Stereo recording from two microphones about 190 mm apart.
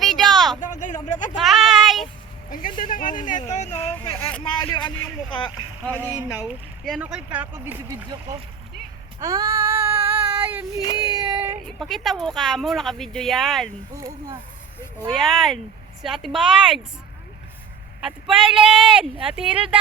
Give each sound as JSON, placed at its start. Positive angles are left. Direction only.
{"t": 0.0, "sound": "a sound", "side_deg": 0}
{"t": 0.6, "sound": "a sound", "side_deg": 40}
{"t": 1.4, "sound": "a sound", "side_deg": 0}
{"t": 2.5, "sound": "a sound", "side_deg": 45}
{"t": 4.0, "sound": "vehicle", "side_deg": 25}
{"t": 5.3, "sound": "speech", "side_deg": 25}
{"t": 6.8, "sound": "speech", "side_deg": 0}
{"t": 9.2, "sound": "female singing", "side_deg": -20}
{"t": 10.2, "sound": "child singing", "side_deg": -10}
{"t": 10.9, "sound": "child singing", "side_deg": -25}
{"t": 11.6, "sound": "speech", "side_deg": 0}
{"t": 14.9, "sound": "speech", "side_deg": 0}
{"t": 18.0, "sound": "speech", "side_deg": -5}